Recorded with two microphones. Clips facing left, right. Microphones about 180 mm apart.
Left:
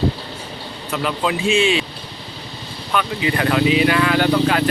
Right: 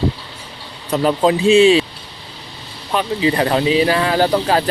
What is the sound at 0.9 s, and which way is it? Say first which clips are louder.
Speech: right 7 dB; 35° right (ahead or behind).